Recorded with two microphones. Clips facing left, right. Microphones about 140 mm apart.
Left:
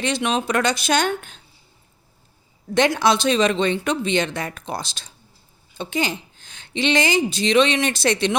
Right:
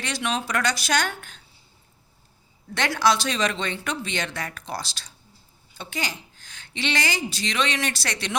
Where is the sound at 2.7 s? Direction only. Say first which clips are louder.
Left 5 dB; 20° left (ahead or behind).